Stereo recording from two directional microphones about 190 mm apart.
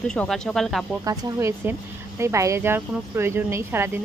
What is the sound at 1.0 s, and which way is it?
Speech, 20° right (ahead or behind).